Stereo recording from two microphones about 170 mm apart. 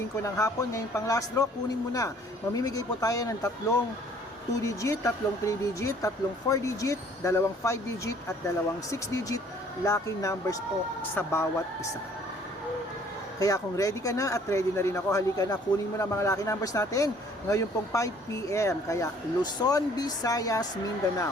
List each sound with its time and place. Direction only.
0.2 s speech: 15° left (ahead or behind)
13.4 s speech: 20° left (ahead or behind)